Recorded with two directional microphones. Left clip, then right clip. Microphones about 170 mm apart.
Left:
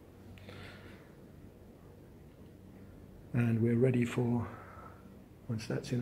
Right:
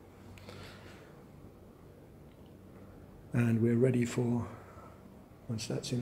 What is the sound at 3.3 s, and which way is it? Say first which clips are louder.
Speech: right 2 dB; 50° right (ahead or behind).